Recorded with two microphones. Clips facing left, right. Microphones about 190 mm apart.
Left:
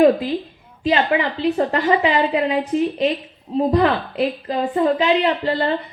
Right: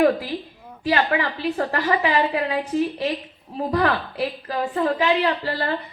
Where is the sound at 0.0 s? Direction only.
20° left (ahead or behind).